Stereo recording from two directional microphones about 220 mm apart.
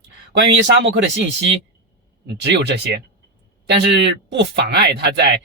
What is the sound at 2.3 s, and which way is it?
Speech, 50° right (ahead or behind).